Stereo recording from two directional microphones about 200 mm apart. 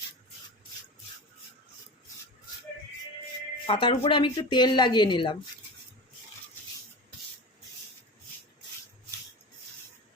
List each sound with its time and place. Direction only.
3.7 s speech: 25° left (ahead or behind)